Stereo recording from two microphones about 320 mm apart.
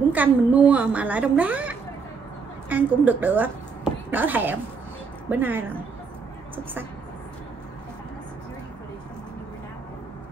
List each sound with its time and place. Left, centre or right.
0.1 s a woman's voice: centre